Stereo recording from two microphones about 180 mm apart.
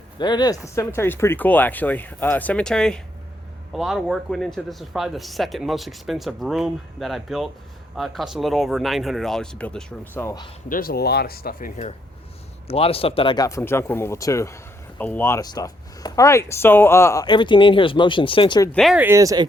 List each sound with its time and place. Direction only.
0.2 s speech: 25° left (ahead or behind)
10.7 s speech: 55° left (ahead or behind)
12.6 s speech: 35° left (ahead or behind); by 17.2 s 15° left (ahead or behind)
17.2 s speech: 25° left (ahead or behind)
18.7 s speech: centre (ahead or behind)
18.9 s speech: 15° right (ahead or behind)